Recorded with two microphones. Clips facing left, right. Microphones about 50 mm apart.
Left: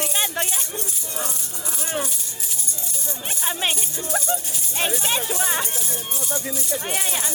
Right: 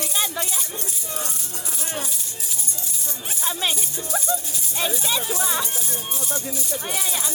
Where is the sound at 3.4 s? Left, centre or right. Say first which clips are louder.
Even; left.